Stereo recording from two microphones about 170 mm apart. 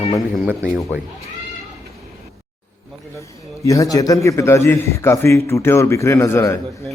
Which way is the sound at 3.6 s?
20° left (ahead or behind).